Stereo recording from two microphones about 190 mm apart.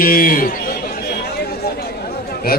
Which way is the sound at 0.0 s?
50° left (ahead or behind).